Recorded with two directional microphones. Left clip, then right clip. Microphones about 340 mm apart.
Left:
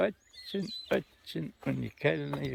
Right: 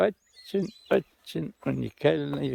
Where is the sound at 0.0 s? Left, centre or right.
Right.